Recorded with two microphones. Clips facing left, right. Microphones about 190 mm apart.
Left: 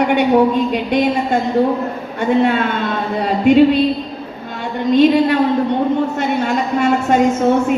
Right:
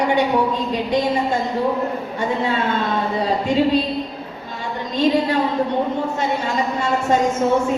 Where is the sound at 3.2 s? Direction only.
65° left (ahead or behind).